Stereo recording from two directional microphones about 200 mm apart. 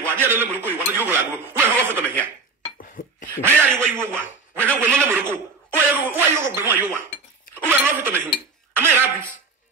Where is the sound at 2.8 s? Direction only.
45° left (ahead or behind).